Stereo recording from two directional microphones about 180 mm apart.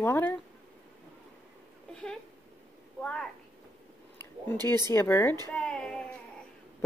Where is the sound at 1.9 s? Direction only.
5° left (ahead or behind).